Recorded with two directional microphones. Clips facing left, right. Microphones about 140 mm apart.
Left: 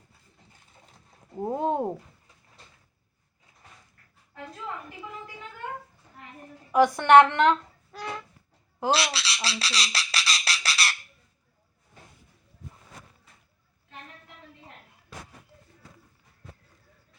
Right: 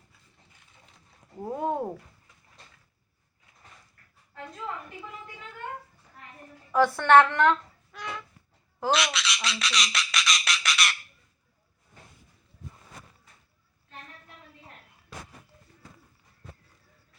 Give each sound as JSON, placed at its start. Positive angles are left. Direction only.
{"t": 1.4, "sound": "speech", "side_deg": 25}
{"t": 6.7, "sound": "a woman's voice", "side_deg": 15}
{"t": 7.9, "sound": "a sound", "side_deg": 35}